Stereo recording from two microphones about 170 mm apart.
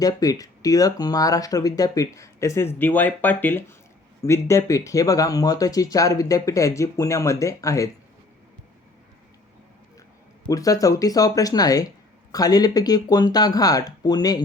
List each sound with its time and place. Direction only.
0.0 s speech: 20° left (ahead or behind)
10.4 s speech: 20° left (ahead or behind)